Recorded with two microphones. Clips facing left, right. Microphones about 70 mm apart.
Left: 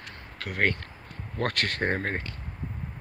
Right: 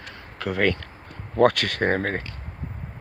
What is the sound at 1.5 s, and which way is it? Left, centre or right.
Speech, right.